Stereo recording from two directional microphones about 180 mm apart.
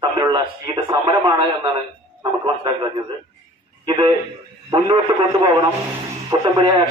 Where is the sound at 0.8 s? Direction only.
20° right (ahead or behind).